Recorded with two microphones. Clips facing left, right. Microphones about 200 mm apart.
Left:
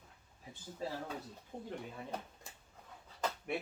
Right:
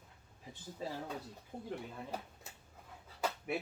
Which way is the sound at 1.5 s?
5° right (ahead or behind).